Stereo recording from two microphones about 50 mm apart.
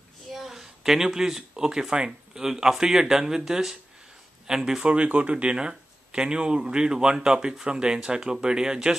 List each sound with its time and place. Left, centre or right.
0.3 s speech: centre
4.8 s speech: right